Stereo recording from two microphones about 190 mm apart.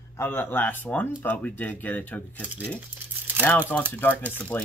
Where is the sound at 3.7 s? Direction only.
5° left (ahead or behind).